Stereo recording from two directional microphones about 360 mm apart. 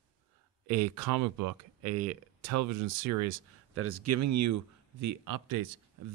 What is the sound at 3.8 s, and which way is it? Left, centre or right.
Speech, right.